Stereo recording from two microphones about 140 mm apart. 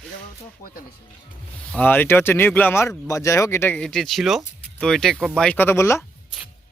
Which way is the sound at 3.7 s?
5° left (ahead or behind).